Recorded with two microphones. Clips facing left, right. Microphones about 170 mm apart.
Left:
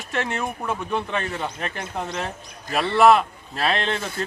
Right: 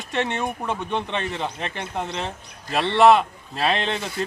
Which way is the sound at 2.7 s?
25° right (ahead or behind).